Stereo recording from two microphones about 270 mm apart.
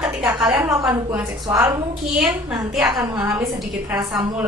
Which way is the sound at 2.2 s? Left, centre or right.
Centre.